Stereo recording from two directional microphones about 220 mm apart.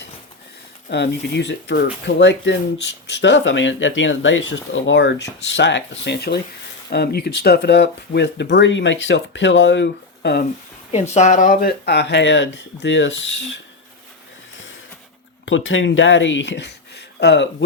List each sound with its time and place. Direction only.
0.9 s speech: 50° left (ahead or behind)
10.9 s speech: 30° left (ahead or behind); by 13.6 s 55° left (ahead or behind)
15.4 s speech: 60° left (ahead or behind)